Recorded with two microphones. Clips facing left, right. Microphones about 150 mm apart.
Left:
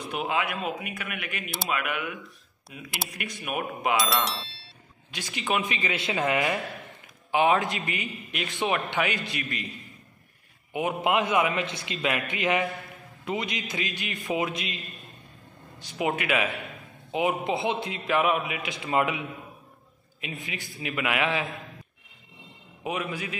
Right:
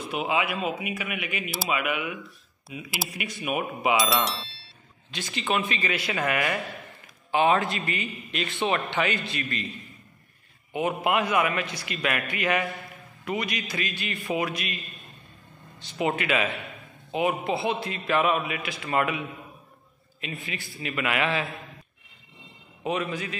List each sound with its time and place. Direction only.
0.0 s a man's voice: centre (ahead or behind)
5.1 s a man's voice: 10° left (ahead or behind)
10.7 s a man's voice: 15° left (ahead or behind)
15.8 s a man's voice: 10° left (ahead or behind)
22.8 s a man's voice: 10° left (ahead or behind)